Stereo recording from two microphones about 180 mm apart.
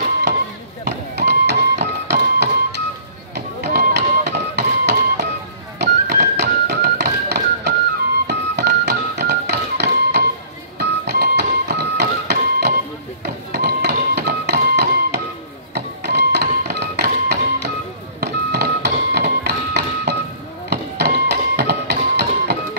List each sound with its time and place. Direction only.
0.8 s music: 70° right (ahead or behind)